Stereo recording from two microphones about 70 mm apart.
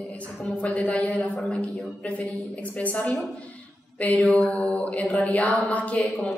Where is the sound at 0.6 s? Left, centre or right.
Left.